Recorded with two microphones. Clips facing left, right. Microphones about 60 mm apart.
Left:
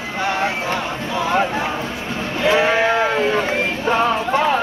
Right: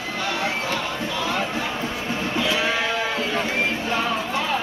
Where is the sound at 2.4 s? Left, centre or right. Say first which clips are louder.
Left 8 dB; left.